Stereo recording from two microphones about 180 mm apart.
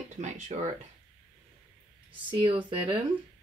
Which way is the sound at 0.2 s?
40° right (ahead or behind).